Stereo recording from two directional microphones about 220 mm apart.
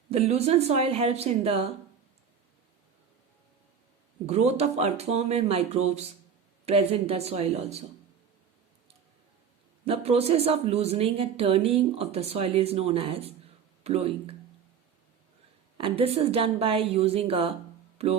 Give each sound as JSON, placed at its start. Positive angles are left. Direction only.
{"t": 0.1, "sound": "speech", "side_deg": -30}
{"t": 4.3, "sound": "speech", "side_deg": -30}
{"t": 9.8, "sound": "speech", "side_deg": -25}
{"t": 15.8, "sound": "speech", "side_deg": -25}
{"t": 17.9, "sound": "music", "side_deg": -30}